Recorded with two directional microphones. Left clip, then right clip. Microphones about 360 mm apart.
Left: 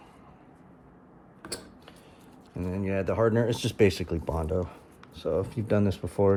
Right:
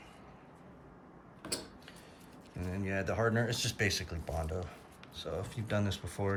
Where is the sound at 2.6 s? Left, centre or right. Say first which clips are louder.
Left 7 dB; centre.